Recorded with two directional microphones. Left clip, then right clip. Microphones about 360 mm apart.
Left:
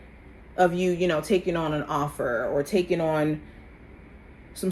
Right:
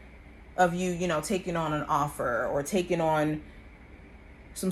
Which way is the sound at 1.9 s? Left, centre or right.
Right.